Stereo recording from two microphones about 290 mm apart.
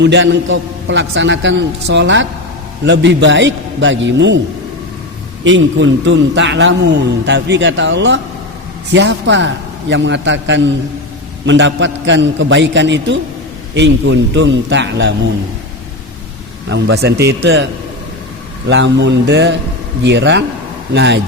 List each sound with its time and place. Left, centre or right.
0.0 s a man's voice: right
5.4 s a man's voice: right
16.6 s a man's voice: right
18.7 s a man's voice: right